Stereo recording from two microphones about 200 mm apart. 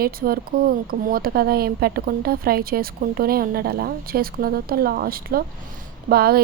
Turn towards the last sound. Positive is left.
turn(degrees=-50)  # may be behind; listen again after turning